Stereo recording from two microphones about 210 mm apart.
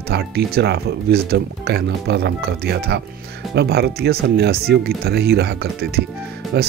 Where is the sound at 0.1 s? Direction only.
50° right (ahead or behind).